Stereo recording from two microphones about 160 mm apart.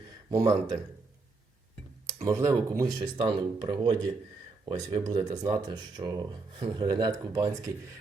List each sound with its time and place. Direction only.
0.3 s speech: 20° right (ahead or behind)
2.2 s speech: 20° right (ahead or behind)